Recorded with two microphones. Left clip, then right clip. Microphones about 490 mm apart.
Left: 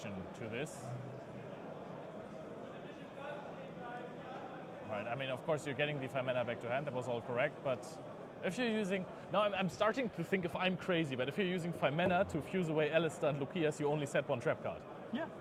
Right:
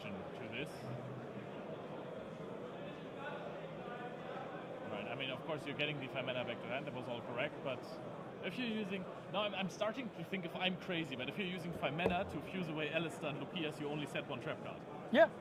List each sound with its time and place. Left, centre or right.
4.9 s a man's voice: left